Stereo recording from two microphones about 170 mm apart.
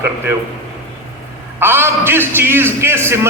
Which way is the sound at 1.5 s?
15° right (ahead or behind).